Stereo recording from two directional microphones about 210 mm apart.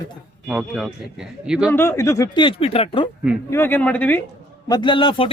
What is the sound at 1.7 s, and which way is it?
Speech, 10° left (ahead or behind).